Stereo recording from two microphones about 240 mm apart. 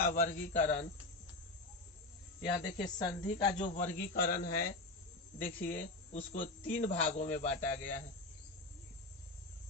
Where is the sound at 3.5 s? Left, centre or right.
Left.